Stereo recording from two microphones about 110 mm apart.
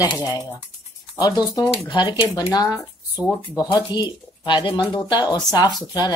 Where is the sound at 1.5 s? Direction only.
40° left (ahead or behind).